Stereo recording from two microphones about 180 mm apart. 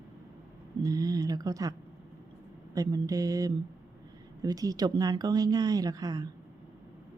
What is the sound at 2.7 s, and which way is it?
Speech, 20° right (ahead or behind).